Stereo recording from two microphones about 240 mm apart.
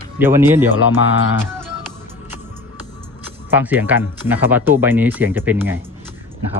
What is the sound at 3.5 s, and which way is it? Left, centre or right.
Speech, centre.